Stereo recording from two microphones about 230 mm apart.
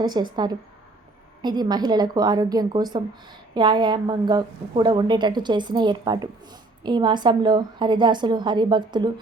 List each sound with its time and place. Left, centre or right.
0.0 s a woman's voice: centre
1.4 s a woman's voice: centre